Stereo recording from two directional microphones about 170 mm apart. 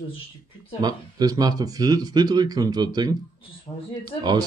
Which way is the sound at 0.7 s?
25° right (ahead or behind).